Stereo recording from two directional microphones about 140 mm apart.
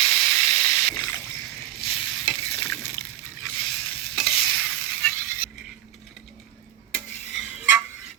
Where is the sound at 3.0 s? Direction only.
90° left.